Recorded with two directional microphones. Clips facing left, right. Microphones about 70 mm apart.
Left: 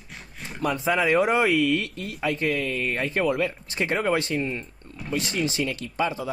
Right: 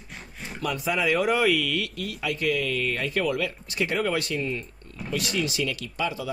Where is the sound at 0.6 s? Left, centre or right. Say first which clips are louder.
Left 3 dB; left.